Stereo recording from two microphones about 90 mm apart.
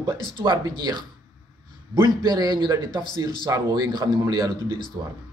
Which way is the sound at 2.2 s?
50° right (ahead or behind).